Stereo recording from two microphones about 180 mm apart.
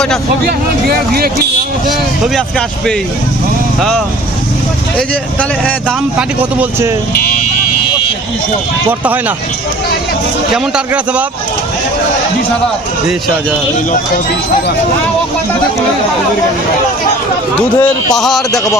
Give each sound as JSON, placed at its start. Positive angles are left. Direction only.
{"t": 0.4, "sound": "speech", "side_deg": -60}
{"t": 2.3, "sound": "a man's voice", "side_deg": 5}
{"t": 6.1, "sound": "a man's voice", "side_deg": -10}
{"t": 10.5, "sound": "a man's voice", "side_deg": -5}
{"t": 17.7, "sound": "a man's voice", "side_deg": 15}
{"t": 18.2, "sound": "speech", "side_deg": 0}
{"t": 18.5, "sound": "a man's voice", "side_deg": 20}